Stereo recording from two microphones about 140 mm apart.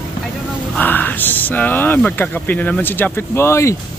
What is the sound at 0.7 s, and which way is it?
Speech, 15° left (ahead or behind).